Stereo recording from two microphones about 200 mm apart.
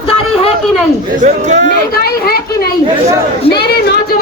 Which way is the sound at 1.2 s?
35° right (ahead or behind).